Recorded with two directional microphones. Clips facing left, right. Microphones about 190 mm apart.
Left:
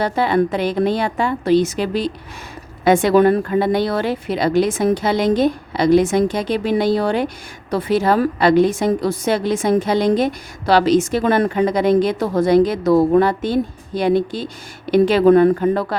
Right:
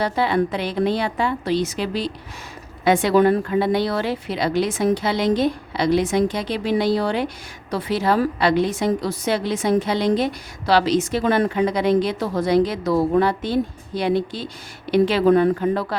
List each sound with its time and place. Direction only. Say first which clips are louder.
0.0 s a woman's voice: left 3 dB; 50° left (ahead or behind)